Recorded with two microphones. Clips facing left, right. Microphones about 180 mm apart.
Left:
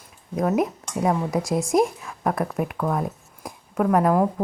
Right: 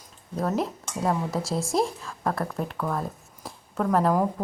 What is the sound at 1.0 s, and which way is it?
Speech, 15° left (ahead or behind).